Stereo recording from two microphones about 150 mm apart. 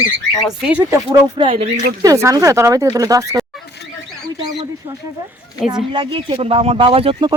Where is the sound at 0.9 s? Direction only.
30° right (ahead or behind).